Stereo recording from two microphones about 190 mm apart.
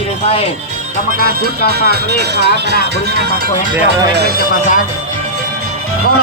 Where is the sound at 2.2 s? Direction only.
60° right (ahead or behind).